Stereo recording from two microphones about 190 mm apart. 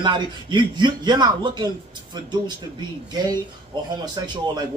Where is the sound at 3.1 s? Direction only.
20° right (ahead or behind).